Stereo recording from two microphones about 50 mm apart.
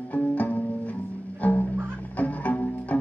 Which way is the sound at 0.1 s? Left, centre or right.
Left.